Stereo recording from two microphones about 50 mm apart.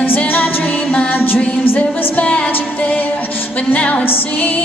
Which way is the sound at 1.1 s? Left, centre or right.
Left.